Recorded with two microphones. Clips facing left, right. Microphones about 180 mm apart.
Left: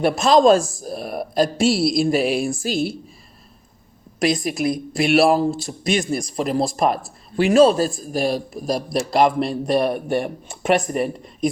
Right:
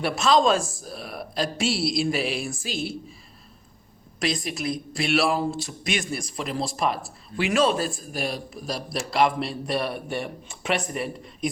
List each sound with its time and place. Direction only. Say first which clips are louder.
0.0 s a woman's voice: left 6 dB; 40° left (ahead or behind)
4.2 s a woman's voice: left 8 dB; 45° left (ahead or behind)